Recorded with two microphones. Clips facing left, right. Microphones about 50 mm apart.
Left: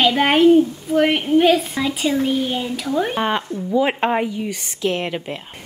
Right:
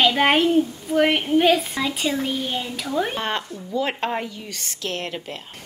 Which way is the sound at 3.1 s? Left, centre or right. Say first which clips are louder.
Left 5 dB; centre.